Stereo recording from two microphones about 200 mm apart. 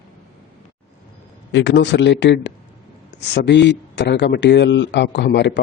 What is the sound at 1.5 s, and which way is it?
Speech, 65° left (ahead or behind).